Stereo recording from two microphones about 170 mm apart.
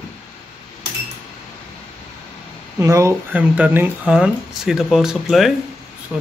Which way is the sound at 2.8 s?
15° right (ahead or behind).